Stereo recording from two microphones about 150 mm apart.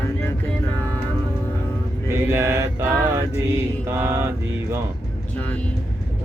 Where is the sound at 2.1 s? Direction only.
15° right (ahead or behind).